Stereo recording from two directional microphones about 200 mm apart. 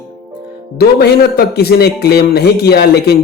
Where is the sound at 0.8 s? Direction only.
50° left (ahead or behind).